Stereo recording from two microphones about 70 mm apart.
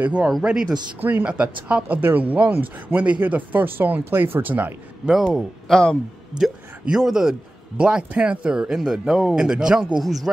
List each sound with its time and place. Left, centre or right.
0.0 s a man's voice: centre
5.1 s a man's voice: centre